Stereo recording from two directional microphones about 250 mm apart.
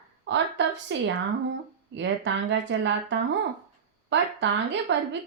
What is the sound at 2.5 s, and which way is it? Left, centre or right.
Speech, right.